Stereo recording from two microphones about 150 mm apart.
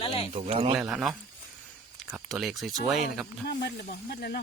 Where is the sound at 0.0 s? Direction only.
40° left (ahead or behind).